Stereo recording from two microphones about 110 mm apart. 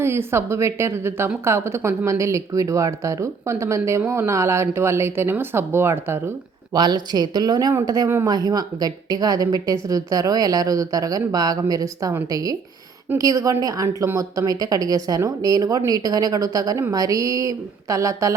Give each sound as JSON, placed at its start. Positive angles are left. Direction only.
{"t": 0.0, "sound": "speech", "side_deg": -20}
{"t": 6.7, "sound": "a woman's voice", "side_deg": -40}